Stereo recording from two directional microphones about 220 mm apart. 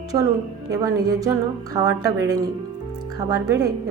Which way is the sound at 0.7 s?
15° right (ahead or behind).